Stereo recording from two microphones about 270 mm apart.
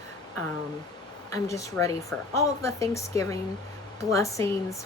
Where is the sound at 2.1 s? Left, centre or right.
Centre.